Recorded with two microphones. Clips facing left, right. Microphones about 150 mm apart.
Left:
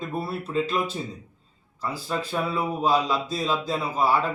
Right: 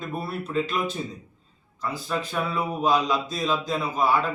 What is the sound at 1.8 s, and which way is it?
A man's voice, 30° left (ahead or behind).